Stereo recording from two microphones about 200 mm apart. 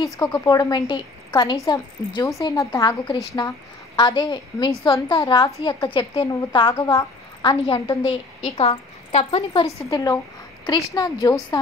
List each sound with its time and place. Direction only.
0.0 s a woman's voice: 20° left (ahead or behind)
8.5 s a woman's voice: 35° left (ahead or behind)